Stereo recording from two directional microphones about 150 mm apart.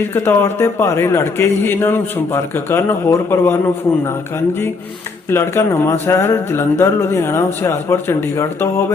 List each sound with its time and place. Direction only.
0.1 s a man's voice: 15° left (ahead or behind)
5.3 s a man's voice: 15° left (ahead or behind)